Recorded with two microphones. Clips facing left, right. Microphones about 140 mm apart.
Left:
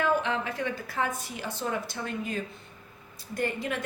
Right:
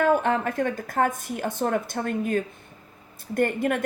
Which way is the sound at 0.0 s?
50° right (ahead or behind).